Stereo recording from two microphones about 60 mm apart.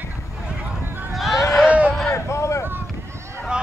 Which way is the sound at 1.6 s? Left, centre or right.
Right.